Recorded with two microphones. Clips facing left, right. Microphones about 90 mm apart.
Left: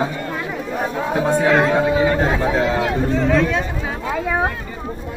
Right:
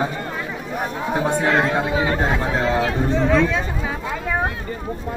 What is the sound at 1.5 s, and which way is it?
Speech, 15° left (ahead or behind).